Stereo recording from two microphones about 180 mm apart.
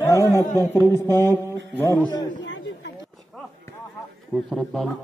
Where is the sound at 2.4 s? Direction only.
90° left.